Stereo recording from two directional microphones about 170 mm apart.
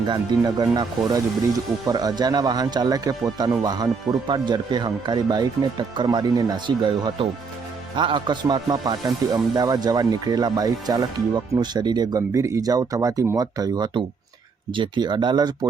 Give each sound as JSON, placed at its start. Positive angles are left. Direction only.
{"t": 0.1, "sound": "speech", "side_deg": -25}